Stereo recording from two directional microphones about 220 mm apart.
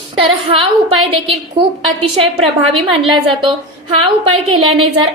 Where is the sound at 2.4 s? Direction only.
25° right (ahead or behind).